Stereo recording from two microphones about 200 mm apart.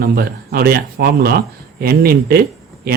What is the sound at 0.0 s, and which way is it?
Speech, 50° right (ahead or behind).